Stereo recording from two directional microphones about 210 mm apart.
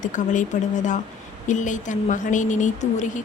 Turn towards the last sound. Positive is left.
turn(degrees=35)  # may be behind; listen again after turning